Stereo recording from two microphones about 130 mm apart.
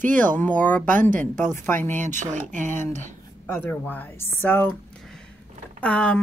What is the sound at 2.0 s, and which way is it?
Speech, 70° right (ahead or behind).